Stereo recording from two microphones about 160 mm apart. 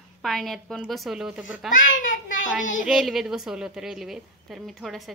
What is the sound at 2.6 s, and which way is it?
Speech, 55° left (ahead or behind).